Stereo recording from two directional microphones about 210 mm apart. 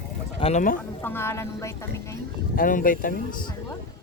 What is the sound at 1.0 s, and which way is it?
A woman's voice, 10° left (ahead or behind).